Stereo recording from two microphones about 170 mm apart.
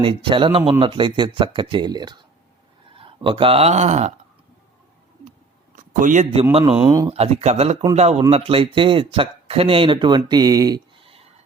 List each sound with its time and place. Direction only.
0.0 s speech: 30° right (ahead or behind)
5.7 s a sound: 50° right (ahead or behind)
6.5 s speech: 35° right (ahead or behind)
6.7 s speech: 15° right (ahead or behind)
7.1 s speech: 35° right (ahead or behind)